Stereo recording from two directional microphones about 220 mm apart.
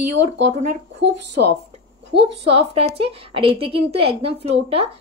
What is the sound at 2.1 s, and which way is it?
A woman's voice, 25° right (ahead or behind).